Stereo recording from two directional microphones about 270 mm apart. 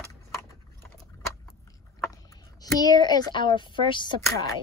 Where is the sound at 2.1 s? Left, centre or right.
Centre.